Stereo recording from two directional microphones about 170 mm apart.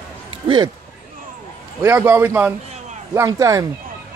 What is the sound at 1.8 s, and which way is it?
Speech, 15° right (ahead or behind).